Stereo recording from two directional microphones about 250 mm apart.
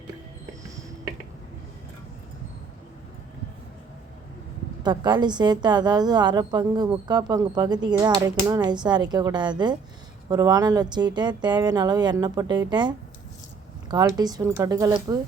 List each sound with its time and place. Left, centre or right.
4.8 s speech: centre